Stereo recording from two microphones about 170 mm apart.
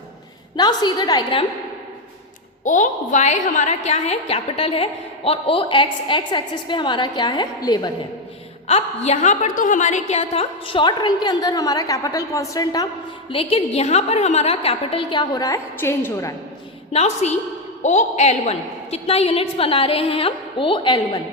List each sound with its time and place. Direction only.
0.5 s a woman's voice: 25° left (ahead or behind)
2.6 s a woman's voice: 45° left (ahead or behind); by 7.9 s 25° left (ahead or behind)
8.6 s a woman's voice: 40° left (ahead or behind); by 12.9 s 20° left (ahead or behind)
13.3 s a woman's voice: 35° left (ahead or behind); by 16.3 s 15° left (ahead or behind)
16.9 s a woman's voice: 40° left (ahead or behind)